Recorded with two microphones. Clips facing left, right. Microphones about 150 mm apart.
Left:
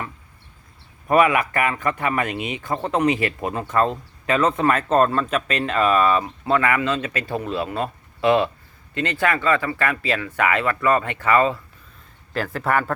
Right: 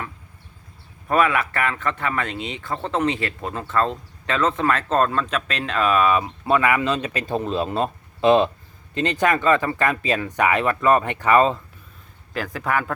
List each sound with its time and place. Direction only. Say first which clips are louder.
1.0 s a man's voice: left 3 dB; 15° left (ahead or behind); by 6.2 s 5° right (ahead or behind)
6.2 s speech: right 1 dB; 15° right (ahead or behind)
12.3 s speech: left 2 dB; 5° right (ahead or behind)